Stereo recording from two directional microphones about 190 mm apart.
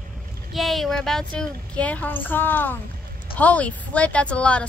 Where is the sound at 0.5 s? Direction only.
Centre (ahead or behind).